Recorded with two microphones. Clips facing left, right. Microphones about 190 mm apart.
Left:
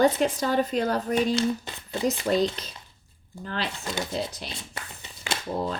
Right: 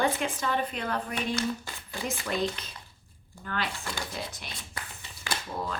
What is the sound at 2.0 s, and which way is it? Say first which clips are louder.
Speech: left 7 dB; 35° left (ahead or behind).